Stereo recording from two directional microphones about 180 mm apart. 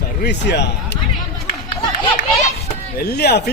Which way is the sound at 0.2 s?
70° left (ahead or behind).